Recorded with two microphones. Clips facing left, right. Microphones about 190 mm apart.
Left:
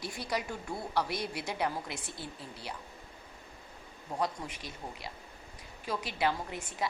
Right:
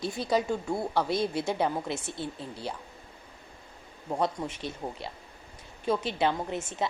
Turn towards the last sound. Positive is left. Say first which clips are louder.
# right 5 dB
turn(degrees=-25)  # may be behind; listen again after turning